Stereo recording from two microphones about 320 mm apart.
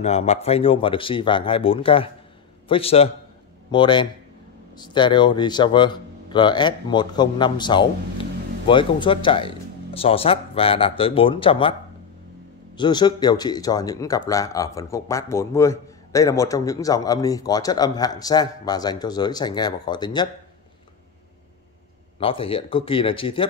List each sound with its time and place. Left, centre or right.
0.0 s speech: centre
12.7 s speech: centre
22.2 s speech: centre